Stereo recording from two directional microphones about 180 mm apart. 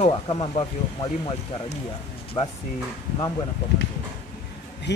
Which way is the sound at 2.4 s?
30° left (ahead or behind).